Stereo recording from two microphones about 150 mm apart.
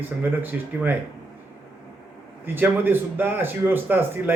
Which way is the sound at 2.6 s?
15° right (ahead or behind).